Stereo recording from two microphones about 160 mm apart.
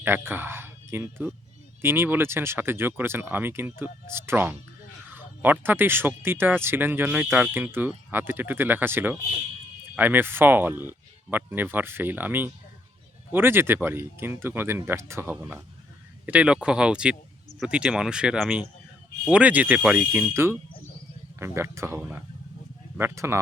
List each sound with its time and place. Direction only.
0.0 s speech: 15° right (ahead or behind)